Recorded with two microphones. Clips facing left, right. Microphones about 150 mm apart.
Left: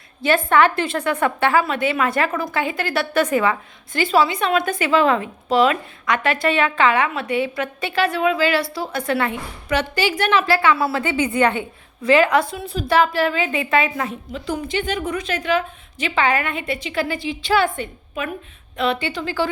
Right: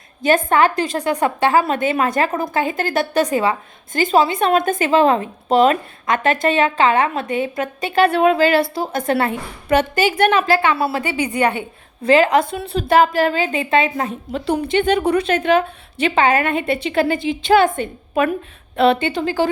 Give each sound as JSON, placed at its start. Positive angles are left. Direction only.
{"t": 0.2, "sound": "a woman's voice", "side_deg": -45}
{"t": 3.9, "sound": "a woman's voice", "side_deg": -45}
{"t": 8.0, "sound": "a woman's voice", "side_deg": -60}
{"t": 10.6, "sound": "a woman's voice", "side_deg": -20}
{"t": 12.0, "sound": "a woman's voice", "side_deg": -35}
{"t": 12.5, "sound": "a woman's voice", "side_deg": -65}
{"t": 13.0, "sound": "a woman's voice", "side_deg": -40}
{"t": 14.3, "sound": "a woman's voice", "side_deg": -65}
{"t": 17.2, "sound": "a woman's voice", "side_deg": -20}
{"t": 17.7, "sound": "a woman's voice", "side_deg": -50}